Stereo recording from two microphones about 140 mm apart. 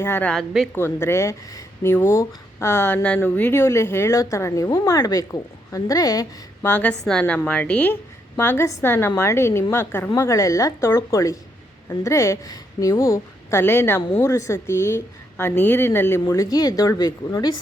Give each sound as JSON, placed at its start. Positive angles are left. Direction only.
{"t": 0.0, "sound": "a woman's voice", "side_deg": 15}
{"t": 6.7, "sound": "a woman's voice", "side_deg": 10}